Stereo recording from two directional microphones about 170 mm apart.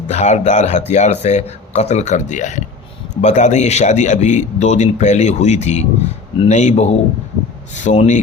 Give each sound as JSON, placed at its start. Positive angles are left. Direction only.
{"t": 0.1, "sound": "a man's voice", "side_deg": 45}